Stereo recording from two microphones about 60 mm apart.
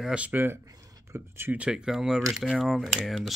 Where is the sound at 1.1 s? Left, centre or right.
Right.